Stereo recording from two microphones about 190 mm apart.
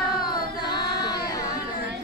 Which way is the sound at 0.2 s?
20° left (ahead or behind).